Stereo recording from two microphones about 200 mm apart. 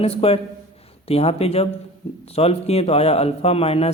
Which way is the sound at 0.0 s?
30° left (ahead or behind).